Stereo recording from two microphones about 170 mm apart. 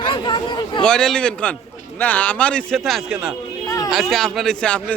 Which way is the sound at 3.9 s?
Centre (ahead or behind).